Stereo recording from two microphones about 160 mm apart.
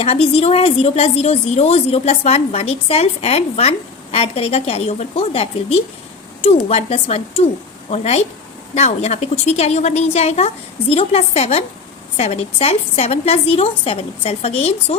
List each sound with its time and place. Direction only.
0.0 s a woman's voice: 35° left (ahead or behind)